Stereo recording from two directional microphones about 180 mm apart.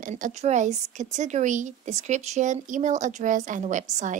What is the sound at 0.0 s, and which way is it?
A woman's voice, 40° right (ahead or behind).